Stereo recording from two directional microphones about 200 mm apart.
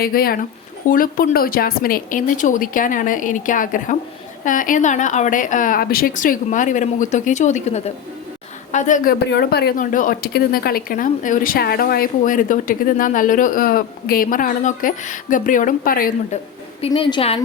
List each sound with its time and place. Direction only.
0.0 s a woman's voice: 50° left (ahead or behind)
9.2 s speech: 55° left (ahead or behind)
16.8 s a woman's voice: 25° left (ahead or behind)